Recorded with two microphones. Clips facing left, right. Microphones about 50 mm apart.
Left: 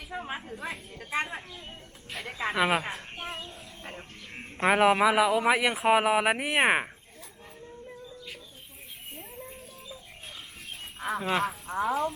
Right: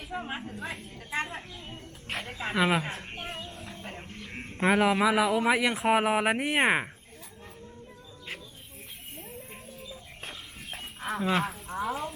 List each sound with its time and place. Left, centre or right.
0.1 s a sound: centre
0.4 s a woman's voice: centre
2.1 s speech: right
2.5 s speech: centre
4.4 s a sound: centre
4.7 s speech: centre
11.0 s speech: centre